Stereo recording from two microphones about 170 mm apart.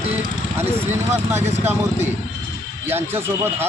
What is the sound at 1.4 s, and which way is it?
Speech, 40° right (ahead or behind).